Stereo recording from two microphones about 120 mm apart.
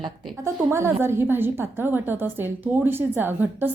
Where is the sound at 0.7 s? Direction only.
20° right (ahead or behind).